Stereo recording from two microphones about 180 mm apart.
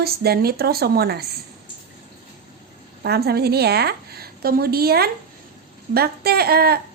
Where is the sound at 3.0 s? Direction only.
60° right (ahead or behind).